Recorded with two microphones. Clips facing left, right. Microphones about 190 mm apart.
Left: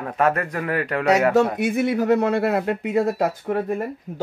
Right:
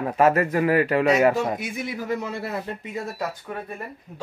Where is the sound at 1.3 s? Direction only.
65° left (ahead or behind).